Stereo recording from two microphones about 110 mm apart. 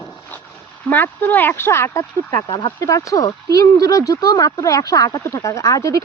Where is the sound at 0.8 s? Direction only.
15° left (ahead or behind).